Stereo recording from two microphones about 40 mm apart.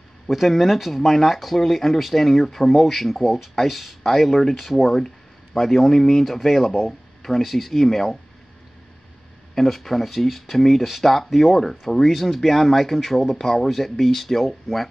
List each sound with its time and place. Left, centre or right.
0.3 s speech: centre
9.6 s speech: centre